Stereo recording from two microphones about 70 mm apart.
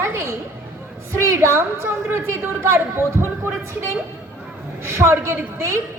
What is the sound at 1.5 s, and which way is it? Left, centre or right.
A woman's voice, right.